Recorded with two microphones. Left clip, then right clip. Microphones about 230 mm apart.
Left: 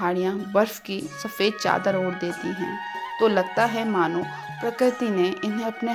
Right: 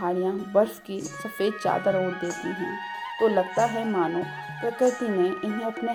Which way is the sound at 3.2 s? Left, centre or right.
Left.